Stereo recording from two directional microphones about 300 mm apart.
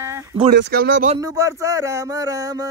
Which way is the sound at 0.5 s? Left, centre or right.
Right.